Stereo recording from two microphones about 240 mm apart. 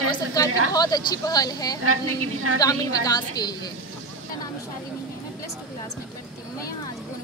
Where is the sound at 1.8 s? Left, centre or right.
Right.